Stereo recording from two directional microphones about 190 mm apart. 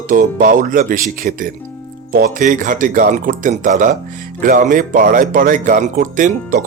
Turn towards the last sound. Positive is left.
turn(degrees=-45)  # may be behind; listen again after turning